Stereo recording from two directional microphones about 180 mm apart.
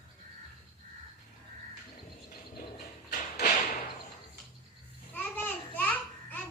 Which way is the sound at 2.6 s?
50° left (ahead or behind).